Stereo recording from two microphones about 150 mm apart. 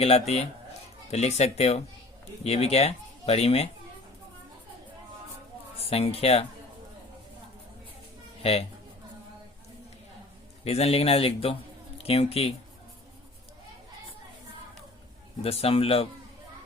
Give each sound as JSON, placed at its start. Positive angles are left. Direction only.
{"t": 0.0, "sound": "speech", "side_deg": 45}
{"t": 5.9, "sound": "speech", "side_deg": 40}
{"t": 10.6, "sound": "speech", "side_deg": 40}
{"t": 15.4, "sound": "speech", "side_deg": 40}